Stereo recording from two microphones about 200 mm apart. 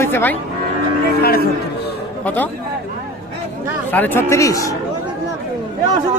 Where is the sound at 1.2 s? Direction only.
50° left (ahead or behind).